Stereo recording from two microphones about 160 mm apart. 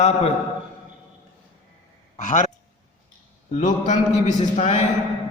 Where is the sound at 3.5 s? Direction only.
50° left (ahead or behind).